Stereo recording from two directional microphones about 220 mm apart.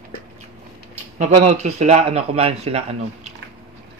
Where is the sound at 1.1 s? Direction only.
30° right (ahead or behind).